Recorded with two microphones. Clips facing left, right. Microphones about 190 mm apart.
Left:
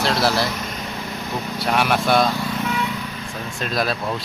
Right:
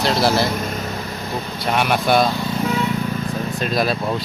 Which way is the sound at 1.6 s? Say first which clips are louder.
Right 1 dB; centre (ahead or behind).